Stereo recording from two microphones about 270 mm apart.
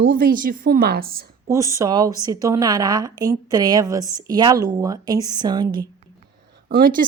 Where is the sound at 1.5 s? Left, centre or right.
Centre.